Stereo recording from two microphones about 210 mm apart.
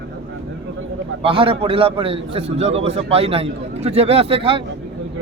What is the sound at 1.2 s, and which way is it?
Speech, 25° right (ahead or behind).